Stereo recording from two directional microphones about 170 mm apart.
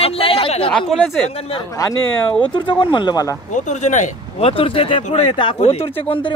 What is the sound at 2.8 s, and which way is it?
Speech, 25° left (ahead or behind).